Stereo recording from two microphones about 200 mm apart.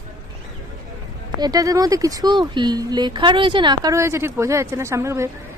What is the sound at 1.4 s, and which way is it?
Speech, 15° right (ahead or behind).